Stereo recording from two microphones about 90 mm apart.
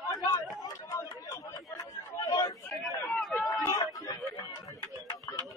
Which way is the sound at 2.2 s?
45° left (ahead or behind).